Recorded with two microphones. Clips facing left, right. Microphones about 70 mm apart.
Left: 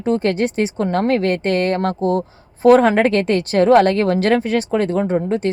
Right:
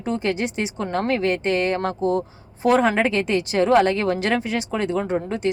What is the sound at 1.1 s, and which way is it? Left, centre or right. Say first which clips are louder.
A woman's voice: left 4 dB; left.